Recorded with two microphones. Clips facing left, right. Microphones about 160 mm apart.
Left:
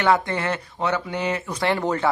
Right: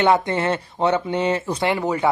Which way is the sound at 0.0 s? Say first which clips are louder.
Right 3 dB; 20° right (ahead or behind).